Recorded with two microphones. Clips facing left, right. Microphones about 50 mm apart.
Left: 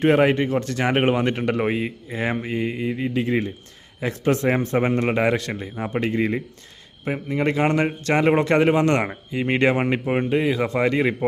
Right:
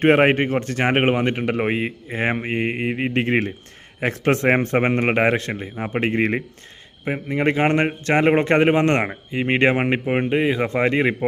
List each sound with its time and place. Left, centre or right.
0.0 s a man's voice: right
6.1 s a man's voice: right